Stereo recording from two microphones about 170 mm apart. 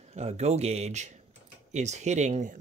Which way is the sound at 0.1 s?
40° right (ahead or behind).